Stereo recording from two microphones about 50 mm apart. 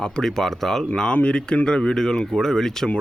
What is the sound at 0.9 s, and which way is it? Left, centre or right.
Speech, left.